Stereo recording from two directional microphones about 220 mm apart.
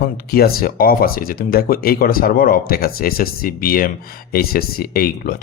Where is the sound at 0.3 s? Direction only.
45° left (ahead or behind).